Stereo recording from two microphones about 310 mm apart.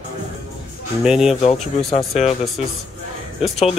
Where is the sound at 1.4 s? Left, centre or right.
Centre.